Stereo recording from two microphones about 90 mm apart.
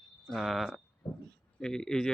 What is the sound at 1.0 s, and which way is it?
Speech, 45° left (ahead or behind).